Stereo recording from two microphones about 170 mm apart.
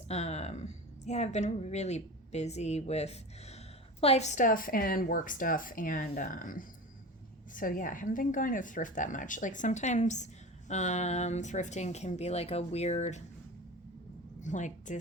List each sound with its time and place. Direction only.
0.1 s a woman's voice: 40° left (ahead or behind)
14.4 s speech: 45° left (ahead or behind)